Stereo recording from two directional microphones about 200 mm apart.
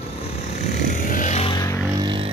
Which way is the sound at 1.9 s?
20° right (ahead or behind).